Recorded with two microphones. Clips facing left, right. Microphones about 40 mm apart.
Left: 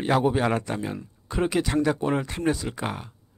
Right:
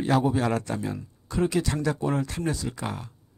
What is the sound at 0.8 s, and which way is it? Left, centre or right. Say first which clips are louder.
Speech: even; left.